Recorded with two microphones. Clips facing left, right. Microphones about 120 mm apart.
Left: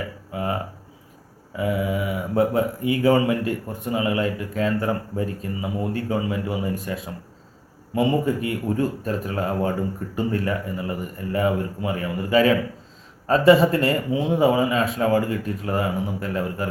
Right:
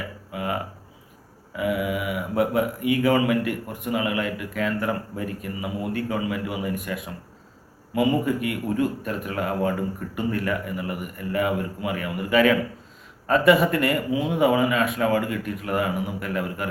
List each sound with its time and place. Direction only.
0.3 s speech: 30° left (ahead or behind)